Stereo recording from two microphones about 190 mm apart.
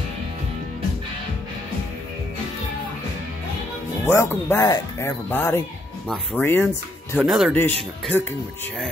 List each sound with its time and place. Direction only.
4.0 s speech: 10° left (ahead or behind)
7.2 s speech: centre (ahead or behind)
7.5 s speech: 10° left (ahead or behind)